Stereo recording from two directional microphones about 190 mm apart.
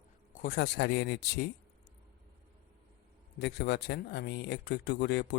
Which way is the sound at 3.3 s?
65° left (ahead or behind).